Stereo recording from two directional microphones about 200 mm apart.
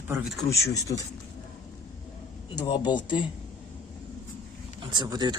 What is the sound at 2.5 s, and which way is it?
Speech, 20° left (ahead or behind).